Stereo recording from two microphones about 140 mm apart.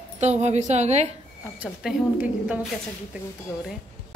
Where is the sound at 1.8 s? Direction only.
5° right (ahead or behind).